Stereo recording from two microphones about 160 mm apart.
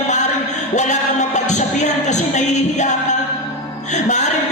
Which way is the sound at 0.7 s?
45° left (ahead or behind).